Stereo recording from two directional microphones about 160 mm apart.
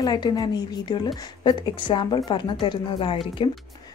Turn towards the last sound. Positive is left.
turn(degrees=30)  # may be behind; listen again after turning